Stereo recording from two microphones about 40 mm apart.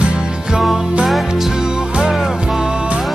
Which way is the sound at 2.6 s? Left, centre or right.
Right.